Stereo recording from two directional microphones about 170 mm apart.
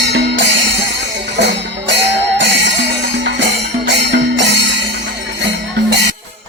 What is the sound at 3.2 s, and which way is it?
Music, 90° right.